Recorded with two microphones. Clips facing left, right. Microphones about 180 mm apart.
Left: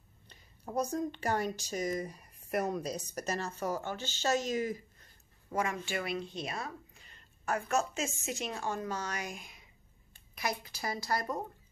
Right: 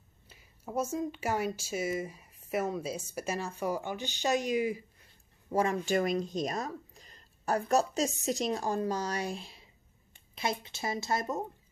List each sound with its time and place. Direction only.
0.3 s a sound: 5° right (ahead or behind)
0.9 s speech: 5° right (ahead or behind)
5.5 s speech: 35° right (ahead or behind)